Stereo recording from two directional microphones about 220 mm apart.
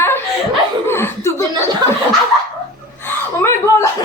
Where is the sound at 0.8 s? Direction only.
10° left (ahead or behind).